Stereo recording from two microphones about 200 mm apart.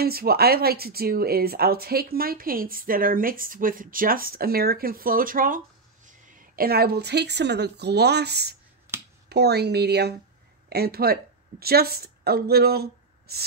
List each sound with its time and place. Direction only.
0.0 s a woman's voice: 50° right (ahead or behind)